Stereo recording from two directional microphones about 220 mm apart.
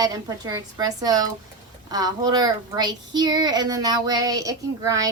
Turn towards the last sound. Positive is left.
turn(degrees=-15)  # may be behind; listen again after turning